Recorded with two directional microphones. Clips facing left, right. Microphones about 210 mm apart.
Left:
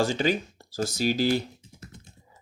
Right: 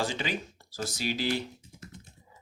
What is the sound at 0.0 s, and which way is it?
Speech, 40° left (ahead or behind).